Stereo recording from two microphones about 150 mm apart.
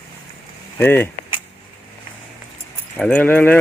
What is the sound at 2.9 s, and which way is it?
Speech, 10° left (ahead or behind).